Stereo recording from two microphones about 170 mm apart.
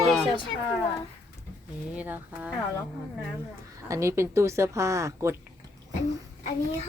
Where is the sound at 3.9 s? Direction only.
15° right (ahead or behind).